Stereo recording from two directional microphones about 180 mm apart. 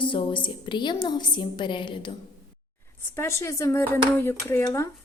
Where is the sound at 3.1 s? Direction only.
15° left (ahead or behind).